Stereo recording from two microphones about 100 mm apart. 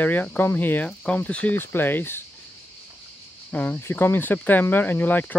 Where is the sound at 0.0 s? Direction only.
15° left (ahead or behind).